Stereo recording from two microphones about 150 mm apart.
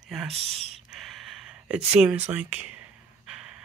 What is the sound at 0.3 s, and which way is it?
Speech, 40° right (ahead or behind).